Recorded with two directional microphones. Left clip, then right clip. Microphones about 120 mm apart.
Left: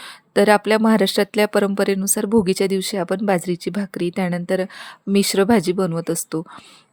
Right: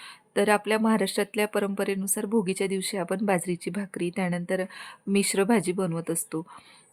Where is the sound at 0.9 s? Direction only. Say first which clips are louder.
Left 8 dB; 50° left (ahead or behind).